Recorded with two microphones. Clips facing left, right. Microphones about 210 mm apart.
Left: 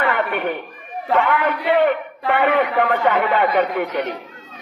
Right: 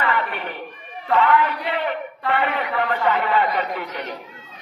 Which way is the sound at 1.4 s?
55° left (ahead or behind).